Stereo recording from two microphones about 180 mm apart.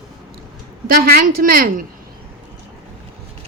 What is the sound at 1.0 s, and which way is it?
Speech, 55° right (ahead or behind).